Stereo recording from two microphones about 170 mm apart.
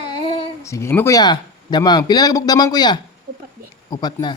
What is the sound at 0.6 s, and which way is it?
Speech, 15° left (ahead or behind).